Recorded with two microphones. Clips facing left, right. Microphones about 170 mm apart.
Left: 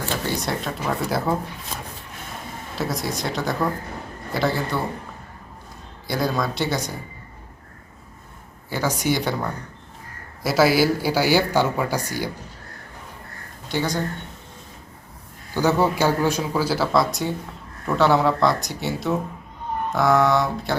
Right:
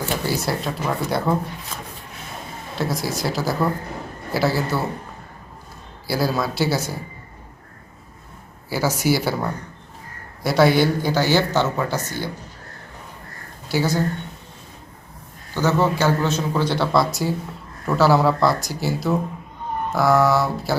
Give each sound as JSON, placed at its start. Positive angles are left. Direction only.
{"t": 0.3, "sound": "a man's voice", "side_deg": -5}
{"t": 2.7, "sound": "a man's voice", "side_deg": 0}
{"t": 6.1, "sound": "a man's voice", "side_deg": -5}
{"t": 8.7, "sound": "speech", "side_deg": -10}
{"t": 13.7, "sound": "speech", "side_deg": -5}
{"t": 15.5, "sound": "a man's voice", "side_deg": 15}